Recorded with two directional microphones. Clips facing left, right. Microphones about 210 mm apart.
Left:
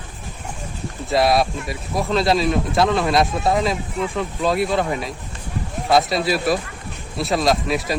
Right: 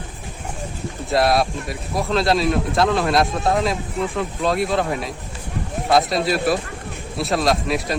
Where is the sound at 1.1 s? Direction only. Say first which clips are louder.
Left 1 dB; centre (ahead or behind).